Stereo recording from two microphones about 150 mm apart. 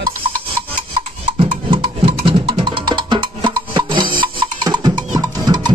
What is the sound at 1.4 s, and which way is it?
Music, 35° right (ahead or behind).